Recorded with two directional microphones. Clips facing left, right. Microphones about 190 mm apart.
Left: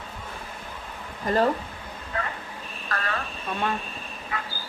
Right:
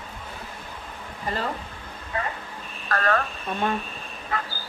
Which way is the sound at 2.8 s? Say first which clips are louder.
Right 7 dB; 45° right (ahead or behind).